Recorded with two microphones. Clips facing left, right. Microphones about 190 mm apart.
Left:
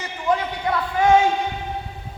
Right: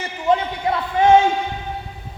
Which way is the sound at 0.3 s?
25° right (ahead or behind).